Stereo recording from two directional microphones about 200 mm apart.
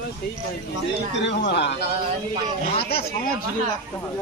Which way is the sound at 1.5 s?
60° left (ahead or behind).